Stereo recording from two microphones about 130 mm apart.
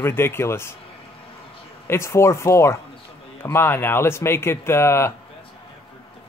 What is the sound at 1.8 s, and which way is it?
Speech, 20° left (ahead or behind).